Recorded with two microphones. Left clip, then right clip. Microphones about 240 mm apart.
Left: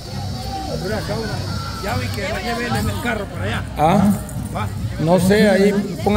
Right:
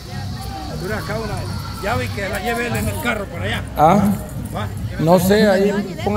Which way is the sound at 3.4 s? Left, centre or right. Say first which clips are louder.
Right 4 dB; centre.